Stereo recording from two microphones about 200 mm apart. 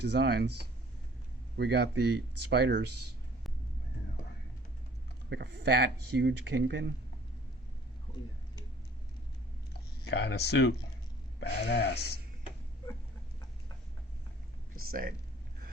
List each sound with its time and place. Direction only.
0.0 s speech: 55° right (ahead or behind)
5.3 s speech: 55° right (ahead or behind)
10.1 s speech: 55° left (ahead or behind)
14.8 s speech: 45° right (ahead or behind)